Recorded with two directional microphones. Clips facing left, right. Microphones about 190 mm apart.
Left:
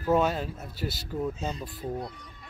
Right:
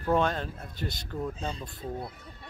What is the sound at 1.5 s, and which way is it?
Speech, 30° right (ahead or behind).